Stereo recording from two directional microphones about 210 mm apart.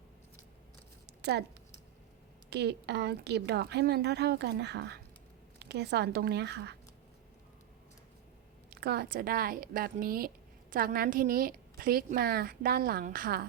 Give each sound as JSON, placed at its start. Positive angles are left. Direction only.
{"t": 1.2, "sound": "speech", "side_deg": -50}
{"t": 2.5, "sound": "speech", "side_deg": -50}
{"t": 8.7, "sound": "speech", "side_deg": -50}